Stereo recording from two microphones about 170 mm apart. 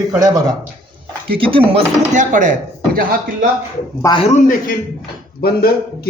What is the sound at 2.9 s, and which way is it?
Speech, 55° right (ahead or behind).